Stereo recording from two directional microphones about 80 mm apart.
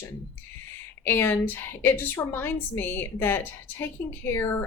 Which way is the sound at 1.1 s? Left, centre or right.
Left.